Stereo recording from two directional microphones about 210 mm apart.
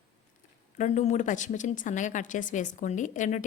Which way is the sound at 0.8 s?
35° left (ahead or behind).